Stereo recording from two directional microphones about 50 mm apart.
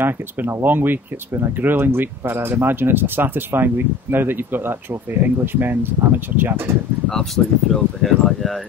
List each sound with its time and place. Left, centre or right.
0.5 s speech: right
7.1 s speech: centre